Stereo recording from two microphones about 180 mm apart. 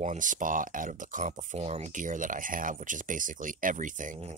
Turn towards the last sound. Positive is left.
turn(degrees=-45)  # may be behind; listen again after turning